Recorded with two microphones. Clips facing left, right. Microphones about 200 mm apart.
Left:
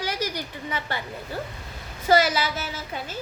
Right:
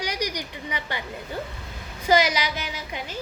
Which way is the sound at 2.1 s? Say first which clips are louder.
Left 1 dB; 15° right (ahead or behind).